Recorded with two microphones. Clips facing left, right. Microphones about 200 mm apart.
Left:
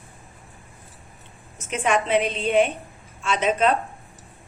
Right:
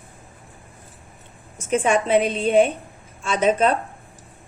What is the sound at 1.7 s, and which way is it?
A woman's voice, 45° right (ahead or behind).